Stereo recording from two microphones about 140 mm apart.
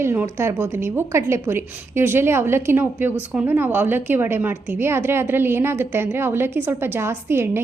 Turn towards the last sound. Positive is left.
turn(degrees=-15)  # may be behind; listen again after turning